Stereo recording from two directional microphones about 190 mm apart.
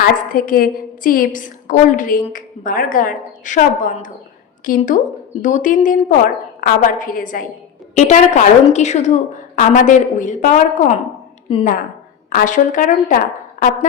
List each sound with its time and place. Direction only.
0.0 s a woman's voice: 50° left (ahead or behind); by 11.7 s 30° left (ahead or behind)
12.3 s a woman's voice: 45° left (ahead or behind)